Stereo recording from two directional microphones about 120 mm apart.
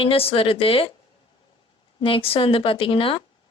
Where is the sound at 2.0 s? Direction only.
50° left (ahead or behind).